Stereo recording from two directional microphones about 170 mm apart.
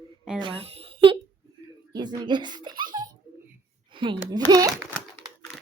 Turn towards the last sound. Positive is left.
turn(degrees=-20)  # may be behind; listen again after turning